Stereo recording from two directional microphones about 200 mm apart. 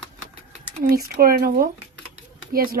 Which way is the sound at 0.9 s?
45° right (ahead or behind).